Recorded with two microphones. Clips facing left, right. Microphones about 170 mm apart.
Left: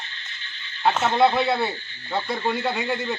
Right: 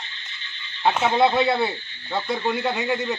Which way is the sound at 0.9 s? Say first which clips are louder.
Even; 10° right (ahead or behind).